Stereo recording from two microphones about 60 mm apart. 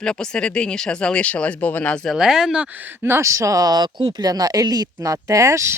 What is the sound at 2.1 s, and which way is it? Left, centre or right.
Speech, centre.